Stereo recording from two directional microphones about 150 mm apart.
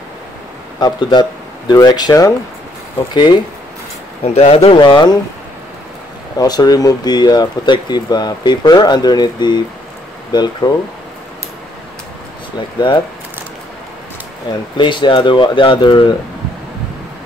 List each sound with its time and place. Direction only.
0.7 s speech: 30° left (ahead or behind)
4.2 s speech: 45° left (ahead or behind)
4.6 s speech: 30° left (ahead or behind)
6.3 s speech: 25° left (ahead or behind)
12.5 s speech: 30° left (ahead or behind)
14.8 s speech: 35° left (ahead or behind)